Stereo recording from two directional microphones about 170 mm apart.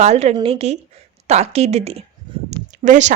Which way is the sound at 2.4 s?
45° right (ahead or behind).